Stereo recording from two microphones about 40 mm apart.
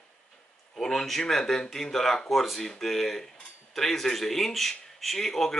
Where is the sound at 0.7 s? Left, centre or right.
Centre.